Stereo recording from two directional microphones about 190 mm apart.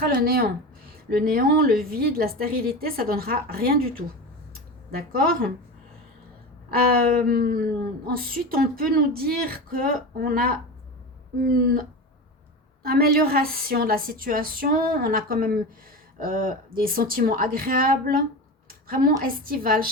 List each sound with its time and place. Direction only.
0.2 s a woman's voice: 50° right (ahead or behind)
6.7 s a woman's voice: 50° right (ahead or behind)